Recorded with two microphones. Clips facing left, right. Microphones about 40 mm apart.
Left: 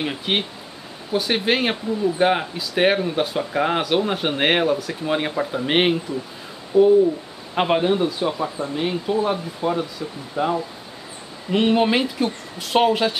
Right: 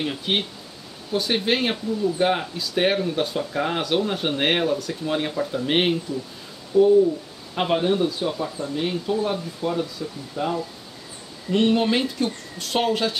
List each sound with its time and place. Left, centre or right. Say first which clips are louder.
0.0 s speech: left 1 dB; centre